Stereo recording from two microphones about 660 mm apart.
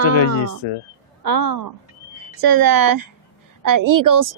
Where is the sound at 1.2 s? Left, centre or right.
Right.